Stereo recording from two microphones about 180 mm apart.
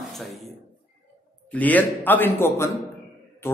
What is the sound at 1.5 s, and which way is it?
A man's voice, 10° left (ahead or behind).